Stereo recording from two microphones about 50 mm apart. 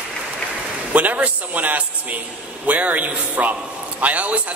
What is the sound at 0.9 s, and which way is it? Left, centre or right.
A man's voice, right.